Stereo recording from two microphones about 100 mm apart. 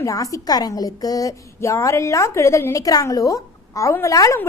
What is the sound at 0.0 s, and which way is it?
A woman's voice, 35° left (ahead or behind).